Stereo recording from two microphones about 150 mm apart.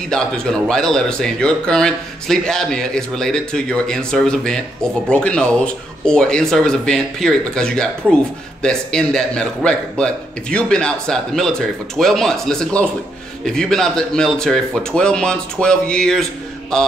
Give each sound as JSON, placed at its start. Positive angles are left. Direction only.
{"t": 0.1, "sound": "speech", "side_deg": 5}